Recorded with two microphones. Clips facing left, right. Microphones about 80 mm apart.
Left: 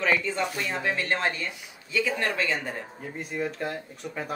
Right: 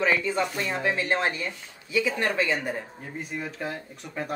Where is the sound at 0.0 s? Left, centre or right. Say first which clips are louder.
Right 1 dB; centre.